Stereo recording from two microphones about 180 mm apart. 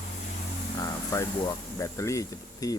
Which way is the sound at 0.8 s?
20° left (ahead or behind).